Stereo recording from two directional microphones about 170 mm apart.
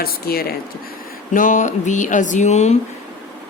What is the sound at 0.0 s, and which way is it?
Speech, 65° left (ahead or behind).